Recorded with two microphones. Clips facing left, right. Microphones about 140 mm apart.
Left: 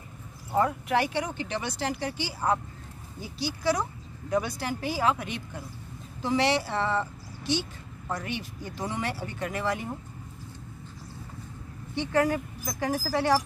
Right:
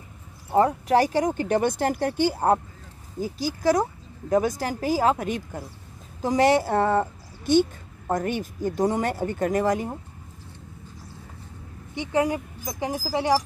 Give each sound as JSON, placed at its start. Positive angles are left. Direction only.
{"t": 0.5, "sound": "a woman's voice", "side_deg": -30}
{"t": 11.9, "sound": "speech", "side_deg": -20}